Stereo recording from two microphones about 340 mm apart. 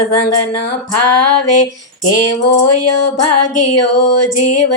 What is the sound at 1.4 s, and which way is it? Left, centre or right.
Music, left.